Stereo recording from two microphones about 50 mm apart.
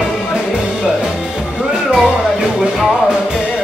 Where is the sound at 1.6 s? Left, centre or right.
Centre.